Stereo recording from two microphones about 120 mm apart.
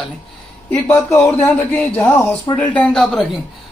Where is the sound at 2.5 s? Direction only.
10° left (ahead or behind).